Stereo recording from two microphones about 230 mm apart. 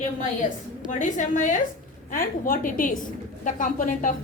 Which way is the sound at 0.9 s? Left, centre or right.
Left.